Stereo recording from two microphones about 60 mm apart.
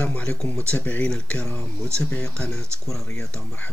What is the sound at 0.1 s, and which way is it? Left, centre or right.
Speech, centre.